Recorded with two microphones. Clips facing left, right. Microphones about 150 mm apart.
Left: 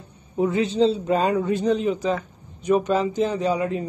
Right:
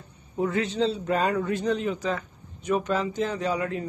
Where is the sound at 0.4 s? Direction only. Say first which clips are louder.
Left 5 dB; 20° left (ahead or behind).